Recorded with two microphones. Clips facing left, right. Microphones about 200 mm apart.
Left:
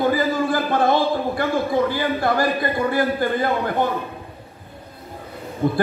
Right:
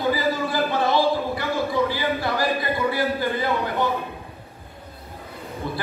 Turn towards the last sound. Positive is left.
turn(degrees=50)  # may be behind; listen again after turning